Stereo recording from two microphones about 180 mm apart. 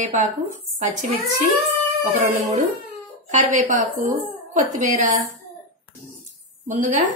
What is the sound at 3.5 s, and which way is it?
Speech, 45° right (ahead or behind).